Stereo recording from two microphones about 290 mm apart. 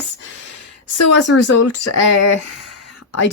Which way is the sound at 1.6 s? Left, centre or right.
Left.